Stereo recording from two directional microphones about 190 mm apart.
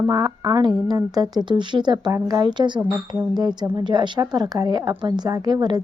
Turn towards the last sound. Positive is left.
turn(degrees=-20)  # may be behind; listen again after turning